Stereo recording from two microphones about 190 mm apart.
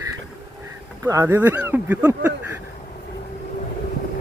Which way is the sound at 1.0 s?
15° right (ahead or behind).